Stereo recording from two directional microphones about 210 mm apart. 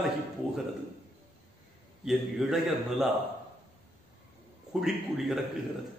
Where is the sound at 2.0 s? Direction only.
Centre (ahead or behind).